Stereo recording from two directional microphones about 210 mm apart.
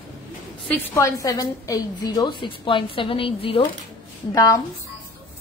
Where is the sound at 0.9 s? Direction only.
15° left (ahead or behind).